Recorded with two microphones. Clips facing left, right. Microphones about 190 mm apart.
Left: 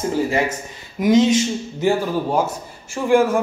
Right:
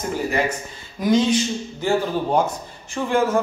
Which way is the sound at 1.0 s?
20° left (ahead or behind).